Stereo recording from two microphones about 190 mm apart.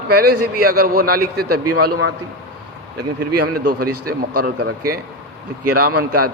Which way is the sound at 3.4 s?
50° right (ahead or behind).